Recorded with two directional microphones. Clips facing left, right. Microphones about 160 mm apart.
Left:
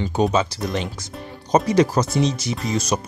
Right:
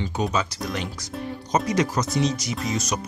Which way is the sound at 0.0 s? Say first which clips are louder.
Left 6 dB; 30° left (ahead or behind).